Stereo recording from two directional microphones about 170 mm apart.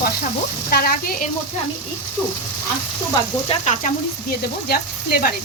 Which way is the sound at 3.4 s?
40° left (ahead or behind).